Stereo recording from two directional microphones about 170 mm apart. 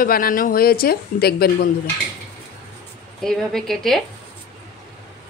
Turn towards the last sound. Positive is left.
turn(degrees=0)  # may be behind; listen again after turning